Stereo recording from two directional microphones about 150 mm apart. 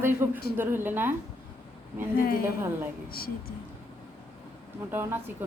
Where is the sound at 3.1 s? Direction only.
90° left.